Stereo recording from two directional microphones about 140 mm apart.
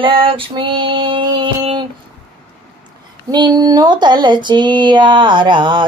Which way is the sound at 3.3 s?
30° right (ahead or behind).